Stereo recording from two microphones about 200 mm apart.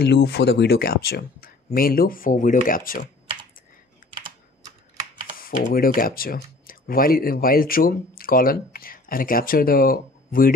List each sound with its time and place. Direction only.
0.0 s speech: 55° left (ahead or behind)
4.0 s computer keyboard: 45° left (ahead or behind)
5.4 s speech: 45° left (ahead or behind)